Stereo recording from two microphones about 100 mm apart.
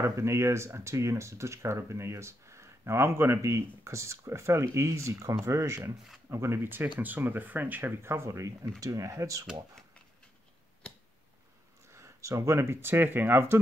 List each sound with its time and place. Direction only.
0.0 s speech: 30° right (ahead or behind)
11.9 s speech: 30° right (ahead or behind)